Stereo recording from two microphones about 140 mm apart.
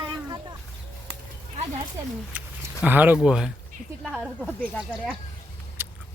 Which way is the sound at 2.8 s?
10° right (ahead or behind).